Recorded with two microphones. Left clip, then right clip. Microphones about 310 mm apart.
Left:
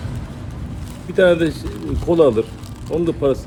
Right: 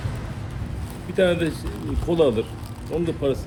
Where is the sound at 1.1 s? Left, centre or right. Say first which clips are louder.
Left 6 dB; centre.